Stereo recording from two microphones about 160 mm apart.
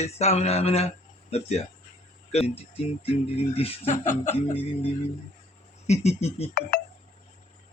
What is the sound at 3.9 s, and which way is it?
Speech, 15° left (ahead or behind).